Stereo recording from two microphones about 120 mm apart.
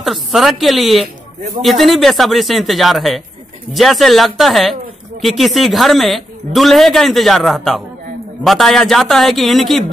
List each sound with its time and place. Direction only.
0.0 s a man's voice: centre (ahead or behind)